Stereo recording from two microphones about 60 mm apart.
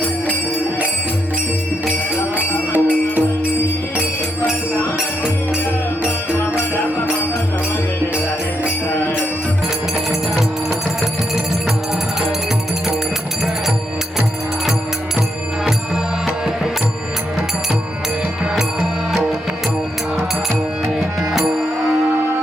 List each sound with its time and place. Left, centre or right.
2.7 s music: right
10.1 s music: centre
20.8 s music: centre